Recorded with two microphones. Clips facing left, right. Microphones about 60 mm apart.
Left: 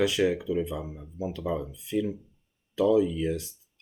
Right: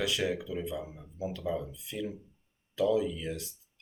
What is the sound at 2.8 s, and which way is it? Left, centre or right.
Speech, left.